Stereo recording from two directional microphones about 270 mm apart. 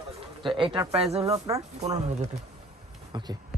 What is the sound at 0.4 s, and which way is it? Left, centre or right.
A man's voice, centre.